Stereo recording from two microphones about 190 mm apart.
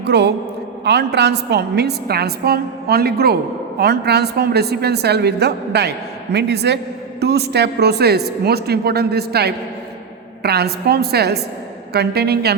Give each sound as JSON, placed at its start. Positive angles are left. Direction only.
{"t": 0.0, "sound": "a woman's voice", "side_deg": -60}